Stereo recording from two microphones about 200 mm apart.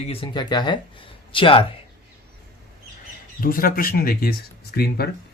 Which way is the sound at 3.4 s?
45° left (ahead or behind).